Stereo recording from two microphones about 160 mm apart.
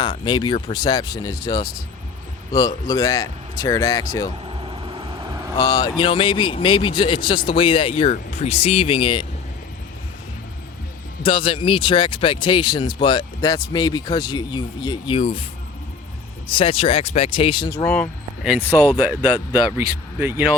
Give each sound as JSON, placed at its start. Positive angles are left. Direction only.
{"t": 0.0, "sound": "speech", "side_deg": 30}
{"t": 4.4, "sound": "vehicle", "side_deg": -35}
{"t": 5.5, "sound": "speech", "side_deg": 25}
{"t": 11.2, "sound": "speech", "side_deg": 30}
{"t": 16.5, "sound": "speech", "side_deg": 35}
{"t": 17.8, "sound": "speech", "side_deg": 10}
{"t": 19.7, "sound": "speech", "side_deg": -15}